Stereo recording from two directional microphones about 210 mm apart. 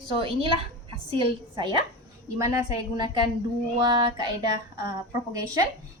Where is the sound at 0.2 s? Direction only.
25° right (ahead or behind).